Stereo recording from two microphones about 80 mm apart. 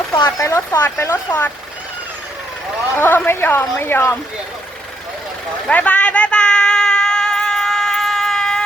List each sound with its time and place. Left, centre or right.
0.3 s speech: left
2.9 s speech: left
5.6 s a sound: centre